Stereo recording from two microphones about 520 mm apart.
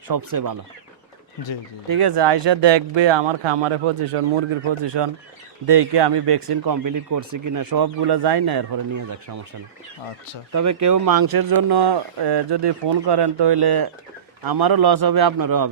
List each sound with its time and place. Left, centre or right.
0.1 s speech: right
1.9 s speech: right
6.5 s speech: right
10.5 s speech: right